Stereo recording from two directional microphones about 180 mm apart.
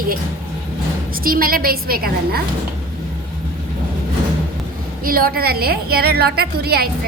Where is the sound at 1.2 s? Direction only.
55° right (ahead or behind).